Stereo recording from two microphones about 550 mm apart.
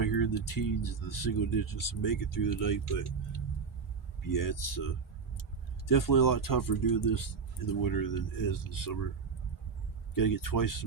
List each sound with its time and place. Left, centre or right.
0.0 s speech: left
10.2 s speech: left